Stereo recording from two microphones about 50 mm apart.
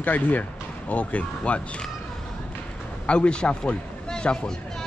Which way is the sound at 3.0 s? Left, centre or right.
Left.